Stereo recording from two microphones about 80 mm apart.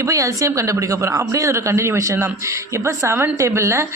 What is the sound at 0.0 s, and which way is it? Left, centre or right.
A woman's voice, right.